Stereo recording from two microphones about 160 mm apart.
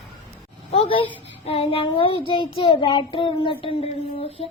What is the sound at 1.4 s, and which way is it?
Speech, 35° left (ahead or behind).